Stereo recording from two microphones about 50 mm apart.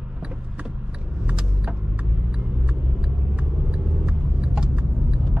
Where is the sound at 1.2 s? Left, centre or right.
Right.